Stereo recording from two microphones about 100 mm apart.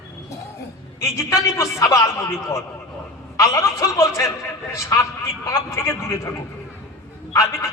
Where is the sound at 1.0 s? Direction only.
30° left (ahead or behind).